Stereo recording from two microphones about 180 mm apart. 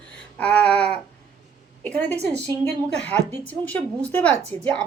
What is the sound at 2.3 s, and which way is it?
Speech, 10° left (ahead or behind).